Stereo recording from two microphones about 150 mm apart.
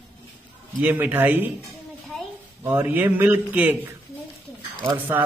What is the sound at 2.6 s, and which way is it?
A man's voice, 15° right (ahead or behind).